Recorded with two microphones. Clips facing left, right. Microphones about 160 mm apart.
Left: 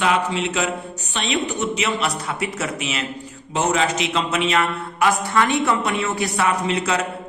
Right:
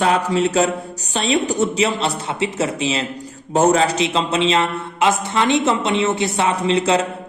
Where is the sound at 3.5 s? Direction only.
40° right (ahead or behind).